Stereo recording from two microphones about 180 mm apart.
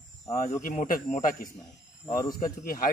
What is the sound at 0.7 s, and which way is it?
Speech, 45° left (ahead or behind).